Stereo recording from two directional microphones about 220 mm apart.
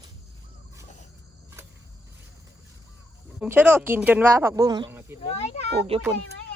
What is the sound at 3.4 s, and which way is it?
A woman's voice, 5° right (ahead or behind).